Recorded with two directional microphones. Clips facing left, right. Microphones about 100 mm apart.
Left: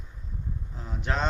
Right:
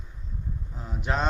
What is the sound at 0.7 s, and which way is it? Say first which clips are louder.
Speech: right 2 dB; 5° right (ahead or behind).